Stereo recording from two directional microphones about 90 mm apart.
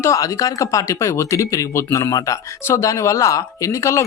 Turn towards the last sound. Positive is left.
turn(degrees=35)  # may be behind; listen again after turning